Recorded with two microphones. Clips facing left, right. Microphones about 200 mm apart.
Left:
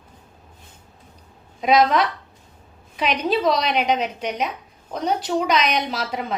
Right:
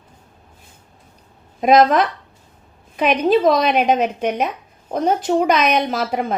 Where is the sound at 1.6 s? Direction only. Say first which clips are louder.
Right 4 dB; 50° right (ahead or behind).